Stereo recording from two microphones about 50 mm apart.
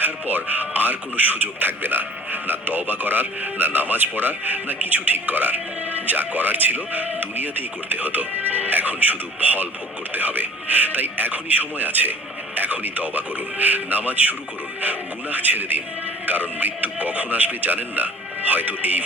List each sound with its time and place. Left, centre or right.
0.0 s a man's voice: right